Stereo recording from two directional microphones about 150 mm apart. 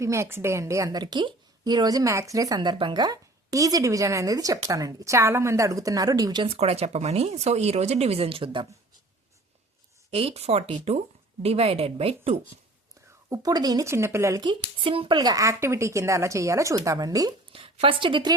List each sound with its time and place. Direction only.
0.0 s a woman's voice: 20° right (ahead or behind)
6.6 s speech: 45° right (ahead or behind)
10.1 s a woman's voice: 40° right (ahead or behind)
13.3 s a woman's voice: 25° right (ahead or behind)
14.8 s a woman's voice: 35° right (ahead or behind)
17.5 s a woman's voice: 35° right (ahead or behind)